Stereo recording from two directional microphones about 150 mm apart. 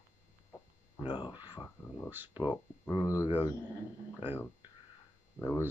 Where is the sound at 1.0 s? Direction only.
30° left (ahead or behind).